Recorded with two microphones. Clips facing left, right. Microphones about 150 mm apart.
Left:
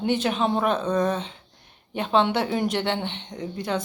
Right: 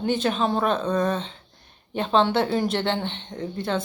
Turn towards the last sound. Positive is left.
turn(degrees=15)  # may be behind; listen again after turning